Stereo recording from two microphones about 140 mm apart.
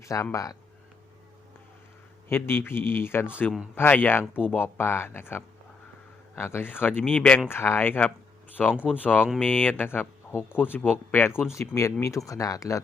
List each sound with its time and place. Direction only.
0.0 s speech: 20° left (ahead or behind)
2.3 s speech: 15° left (ahead or behind)
8.7 s speech: 10° right (ahead or behind)
9.4 s speech: 10° left (ahead or behind)